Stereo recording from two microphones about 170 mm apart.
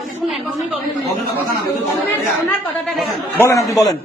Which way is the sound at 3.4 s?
20° left (ahead or behind).